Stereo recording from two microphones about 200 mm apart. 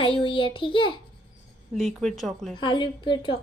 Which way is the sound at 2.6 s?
25° left (ahead or behind).